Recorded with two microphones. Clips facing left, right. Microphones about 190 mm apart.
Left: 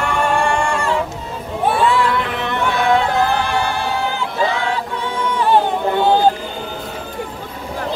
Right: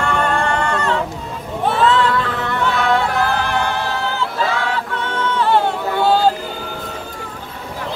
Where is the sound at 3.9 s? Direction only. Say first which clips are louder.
Left 1 dB; 15° left (ahead or behind).